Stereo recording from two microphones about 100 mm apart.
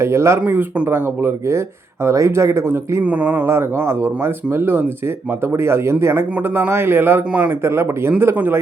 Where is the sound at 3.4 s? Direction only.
25° right (ahead or behind).